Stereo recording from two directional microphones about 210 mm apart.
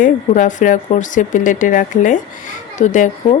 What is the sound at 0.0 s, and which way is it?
Speech, 35° left (ahead or behind).